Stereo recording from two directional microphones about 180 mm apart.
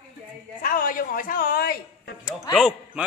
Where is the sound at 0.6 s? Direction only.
50° left (ahead or behind).